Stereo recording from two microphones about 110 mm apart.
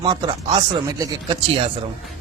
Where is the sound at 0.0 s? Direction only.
45° right (ahead or behind).